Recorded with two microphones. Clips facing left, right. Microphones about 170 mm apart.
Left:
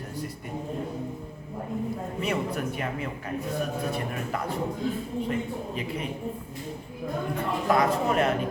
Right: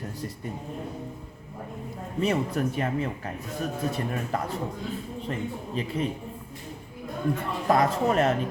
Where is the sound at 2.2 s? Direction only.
40° right (ahead or behind).